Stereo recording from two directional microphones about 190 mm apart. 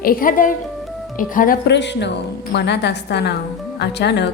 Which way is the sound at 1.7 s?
65° left (ahead or behind).